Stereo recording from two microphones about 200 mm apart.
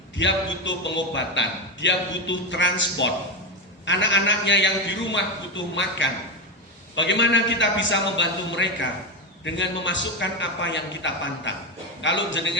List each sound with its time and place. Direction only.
0.2 s a man's voice: 65° left (ahead or behind)